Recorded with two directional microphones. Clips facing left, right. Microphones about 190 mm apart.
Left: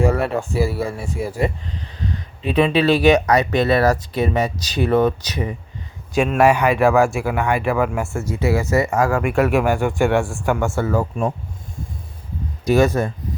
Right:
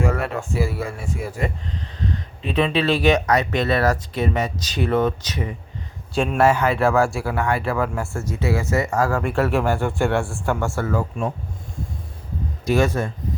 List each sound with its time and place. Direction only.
0.0 s speech: 35° left (ahead or behind)
2.6 s speech: 35° left (ahead or behind)
6.3 s speech: 15° left (ahead or behind)
8.1 s speech: 30° left (ahead or behind)
8.8 s speech: 15° left (ahead or behind)
12.6 s speech: 40° left (ahead or behind)